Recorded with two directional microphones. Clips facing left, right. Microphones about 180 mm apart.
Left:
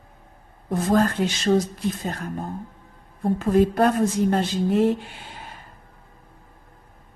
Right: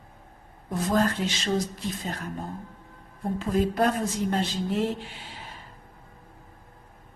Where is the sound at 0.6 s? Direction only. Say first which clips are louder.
Left 4 dB; 50° left (ahead or behind).